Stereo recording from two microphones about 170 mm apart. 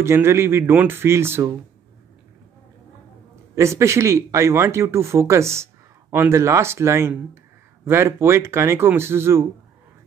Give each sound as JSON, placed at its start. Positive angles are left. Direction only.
{"t": 0.0, "sound": "speech", "side_deg": -15}
{"t": 3.5, "sound": "speech", "side_deg": -15}